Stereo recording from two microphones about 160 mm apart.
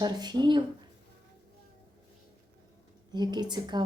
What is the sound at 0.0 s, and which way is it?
Speech, 25° right (ahead or behind).